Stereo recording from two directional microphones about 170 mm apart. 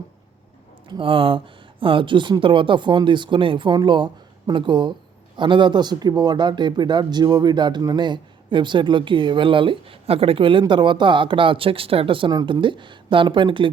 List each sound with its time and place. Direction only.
0.9 s speech: 30° right (ahead or behind)